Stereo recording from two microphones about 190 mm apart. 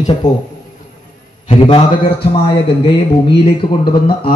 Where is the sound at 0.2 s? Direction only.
40° left (ahead or behind).